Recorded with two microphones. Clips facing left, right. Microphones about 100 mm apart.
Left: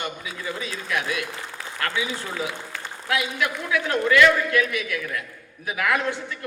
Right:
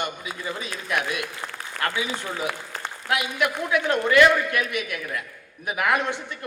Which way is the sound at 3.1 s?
20° right (ahead or behind).